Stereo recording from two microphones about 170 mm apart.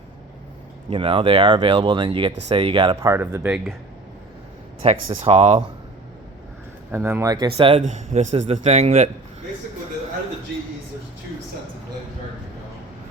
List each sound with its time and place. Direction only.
0.9 s speech: 30° right (ahead or behind)
3.0 s speech: 15° right (ahead or behind)
4.8 s speech: 35° right (ahead or behind)
6.9 s speech: 15° right (ahead or behind)
7.5 s speech: 30° right (ahead or behind)
7.8 s speech: 45° right (ahead or behind)